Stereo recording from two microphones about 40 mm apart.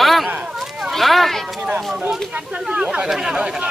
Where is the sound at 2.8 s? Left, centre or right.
Right.